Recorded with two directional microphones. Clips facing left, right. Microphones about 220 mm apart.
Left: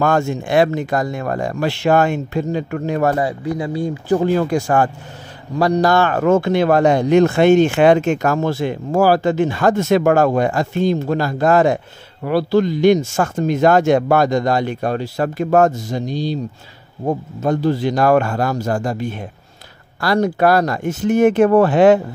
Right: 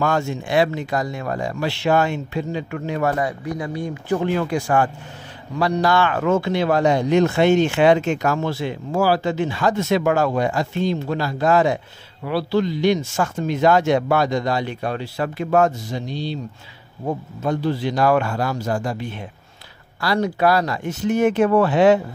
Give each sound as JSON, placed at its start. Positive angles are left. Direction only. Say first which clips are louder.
{"t": 0.0, "sound": "speech", "louder": "left 4 dB", "side_deg": 50}
{"t": 3.2, "sound": "speech", "louder": "left 4 dB", "side_deg": 30}